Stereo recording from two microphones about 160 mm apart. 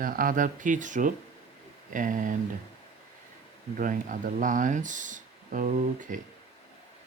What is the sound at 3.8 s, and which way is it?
Speech, 55° right (ahead or behind).